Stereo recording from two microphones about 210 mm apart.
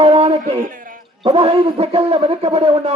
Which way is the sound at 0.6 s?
40° right (ahead or behind).